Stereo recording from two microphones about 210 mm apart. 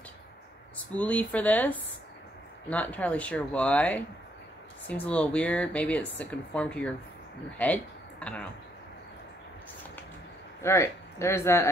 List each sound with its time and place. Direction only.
0.9 s speech: 5° left (ahead or behind)
2.7 s speech: 5° left (ahead or behind)
10.6 s speech: 15° left (ahead or behind)